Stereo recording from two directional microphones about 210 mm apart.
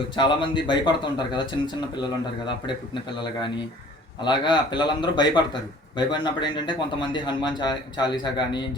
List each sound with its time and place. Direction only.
0.2 s speech: 25° left (ahead or behind)